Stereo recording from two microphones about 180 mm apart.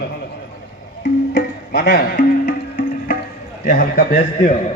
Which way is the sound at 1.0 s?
65° left (ahead or behind).